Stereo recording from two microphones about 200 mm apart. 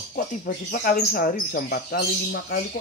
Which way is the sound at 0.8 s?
45° left (ahead or behind).